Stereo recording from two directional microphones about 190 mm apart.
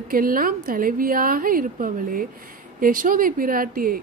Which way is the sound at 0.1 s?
45° right (ahead or behind).